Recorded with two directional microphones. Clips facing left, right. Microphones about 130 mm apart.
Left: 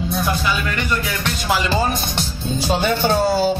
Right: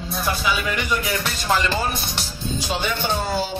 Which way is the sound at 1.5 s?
10° left (ahead or behind).